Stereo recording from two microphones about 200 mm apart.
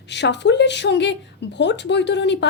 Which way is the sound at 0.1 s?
60° left (ahead or behind).